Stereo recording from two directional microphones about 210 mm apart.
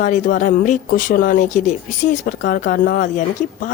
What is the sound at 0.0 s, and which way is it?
Speech, 40° left (ahead or behind).